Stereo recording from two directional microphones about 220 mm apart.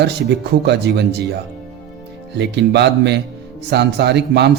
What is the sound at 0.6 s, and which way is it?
A man's voice, 50° right (ahead or behind).